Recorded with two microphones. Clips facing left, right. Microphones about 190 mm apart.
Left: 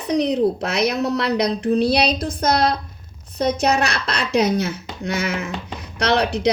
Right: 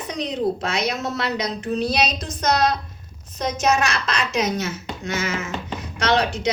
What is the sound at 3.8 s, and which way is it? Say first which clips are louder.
Speech: left 1 dB; 65° left (ahead or behind).